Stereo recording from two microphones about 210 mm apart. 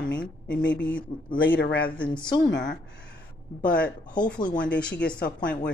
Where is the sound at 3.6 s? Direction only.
5° left (ahead or behind).